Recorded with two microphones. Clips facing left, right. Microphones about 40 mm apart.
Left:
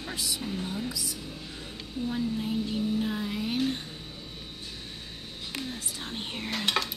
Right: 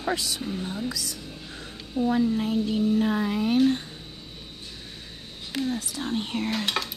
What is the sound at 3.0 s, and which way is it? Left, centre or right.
Speech, right.